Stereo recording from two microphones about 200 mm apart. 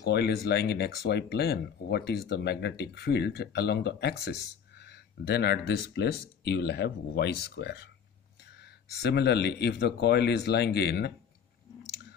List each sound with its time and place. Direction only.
0.1 s speech: 55° left (ahead or behind)